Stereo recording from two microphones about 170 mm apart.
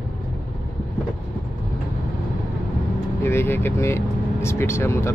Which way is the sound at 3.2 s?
15° left (ahead or behind).